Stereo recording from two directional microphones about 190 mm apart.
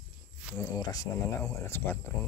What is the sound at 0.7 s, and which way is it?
Speech, 20° left (ahead or behind).